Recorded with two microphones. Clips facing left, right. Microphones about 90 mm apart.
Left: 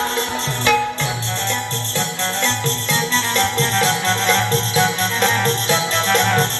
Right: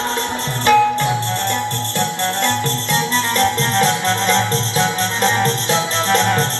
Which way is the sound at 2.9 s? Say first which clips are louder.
Right 3 dB; 40° right (ahead or behind).